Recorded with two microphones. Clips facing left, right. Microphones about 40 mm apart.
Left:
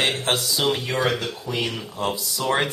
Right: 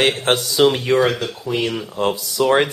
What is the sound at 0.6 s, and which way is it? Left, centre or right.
Speech, centre.